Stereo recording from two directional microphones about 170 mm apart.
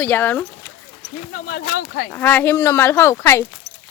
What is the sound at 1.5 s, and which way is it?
Speech, 65° left (ahead or behind).